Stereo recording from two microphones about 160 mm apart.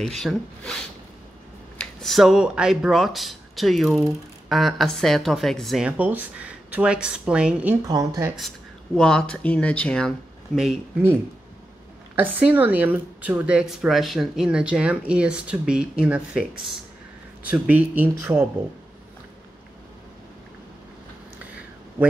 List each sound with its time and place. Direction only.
0.0 s speech: centre (ahead or behind)
7.8 s speech: 20° right (ahead or behind)
8.4 s speech: 5° left (ahead or behind)
12.2 s speech: 10° right (ahead or behind)